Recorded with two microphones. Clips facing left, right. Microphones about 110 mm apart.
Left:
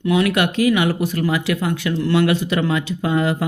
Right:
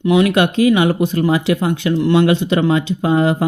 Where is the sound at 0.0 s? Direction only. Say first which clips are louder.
Right 4 dB; 20° right (ahead or behind).